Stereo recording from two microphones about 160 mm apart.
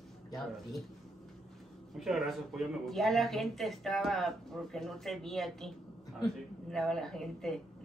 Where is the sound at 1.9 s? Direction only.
Centre (ahead or behind).